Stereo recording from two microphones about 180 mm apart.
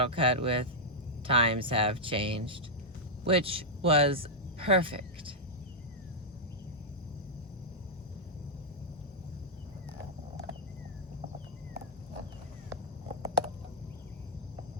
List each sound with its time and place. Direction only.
0.0 s speech: 30° right (ahead or behind)